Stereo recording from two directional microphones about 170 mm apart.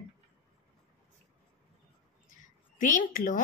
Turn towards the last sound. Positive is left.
turn(degrees=50)  # may be behind; listen again after turning